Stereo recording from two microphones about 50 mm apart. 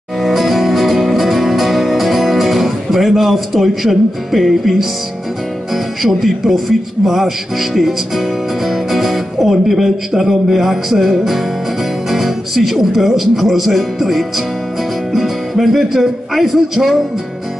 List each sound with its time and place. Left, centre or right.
0.2 s music: centre
6.0 s speech: centre
7.1 s music: centre
12.1 s speech: centre
15.1 s music: centre